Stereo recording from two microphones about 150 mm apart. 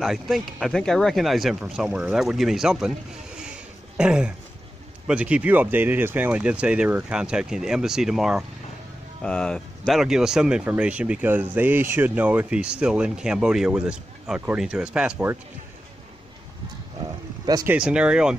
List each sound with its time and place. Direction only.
0.0 s speech: centre (ahead or behind)
3.9 s throat clearing: 5° right (ahead or behind)
5.0 s speech: 10° right (ahead or behind)
17.6 s speech: 5° right (ahead or behind)